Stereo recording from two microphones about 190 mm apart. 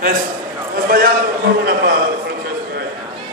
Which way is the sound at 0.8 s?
50° right (ahead or behind).